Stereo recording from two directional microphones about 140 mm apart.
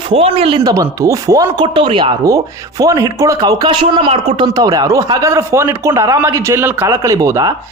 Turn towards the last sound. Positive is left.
turn(degrees=-25)  # may be behind; listen again after turning